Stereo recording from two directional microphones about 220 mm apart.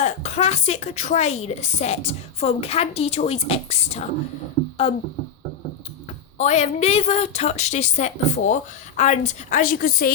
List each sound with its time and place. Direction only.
0.0 s a woman's voice: 30° left (ahead or behind)
6.3 s a woman's voice: 30° left (ahead or behind)